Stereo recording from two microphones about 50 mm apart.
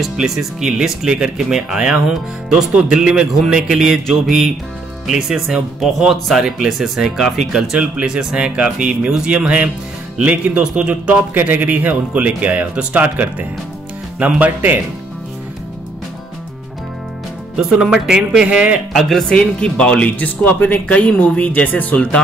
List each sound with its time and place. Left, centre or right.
0.0 s speech: centre
7.7 s speech: centre
10.1 s speech: right
10.6 s speech: centre
11.4 s speech: right
17.6 s speech: centre
18.9 s speech: centre
19.2 s speech: centre